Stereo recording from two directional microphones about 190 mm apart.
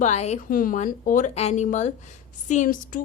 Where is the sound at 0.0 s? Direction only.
35° left (ahead or behind).